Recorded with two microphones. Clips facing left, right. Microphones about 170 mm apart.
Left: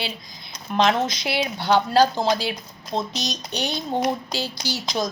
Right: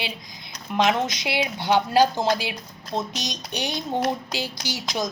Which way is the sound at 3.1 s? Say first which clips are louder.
Left 2 dB; 15° right (ahead or behind).